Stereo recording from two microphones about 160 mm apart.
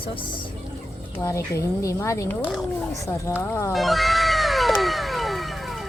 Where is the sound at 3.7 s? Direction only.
Centre (ahead or behind).